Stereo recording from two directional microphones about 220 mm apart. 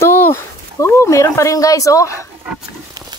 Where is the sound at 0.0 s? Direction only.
10° left (ahead or behind).